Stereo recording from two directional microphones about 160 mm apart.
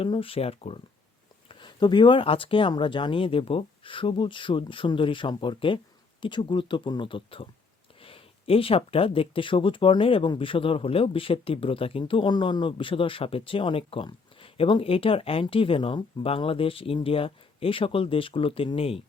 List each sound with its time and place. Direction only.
0.0 s speech: 35° left (ahead or behind)